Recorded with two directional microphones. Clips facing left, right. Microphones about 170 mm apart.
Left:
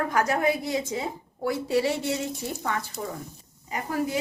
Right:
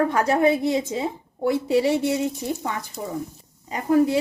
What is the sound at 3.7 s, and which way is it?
Speech, 30° right (ahead or behind).